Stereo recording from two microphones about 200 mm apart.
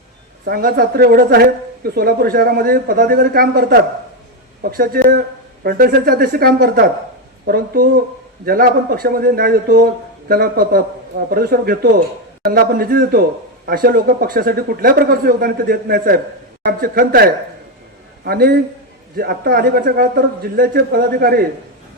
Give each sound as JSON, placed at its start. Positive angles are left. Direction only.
{"t": 0.4, "sound": "speech", "side_deg": -45}